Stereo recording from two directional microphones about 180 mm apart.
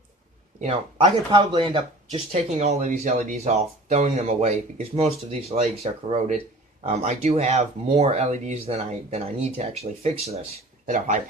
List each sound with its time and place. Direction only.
0.6 s speech: 40° right (ahead or behind)
1.0 s speech: 25° right (ahead or behind)
1.7 s speech: 35° right (ahead or behind)